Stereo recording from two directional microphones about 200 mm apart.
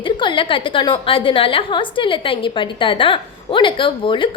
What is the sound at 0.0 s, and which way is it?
A woman's voice, 25° left (ahead or behind).